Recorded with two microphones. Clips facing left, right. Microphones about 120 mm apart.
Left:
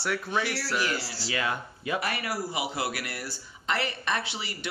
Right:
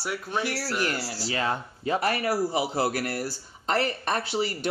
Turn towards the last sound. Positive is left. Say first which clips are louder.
# right 8 dB
turn(degrees=-45)  # may be behind; listen again after turning